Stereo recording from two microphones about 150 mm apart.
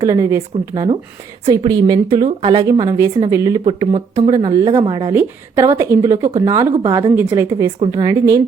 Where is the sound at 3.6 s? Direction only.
35° right (ahead or behind).